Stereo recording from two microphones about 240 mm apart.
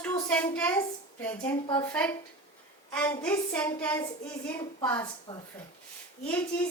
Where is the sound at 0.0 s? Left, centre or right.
Centre.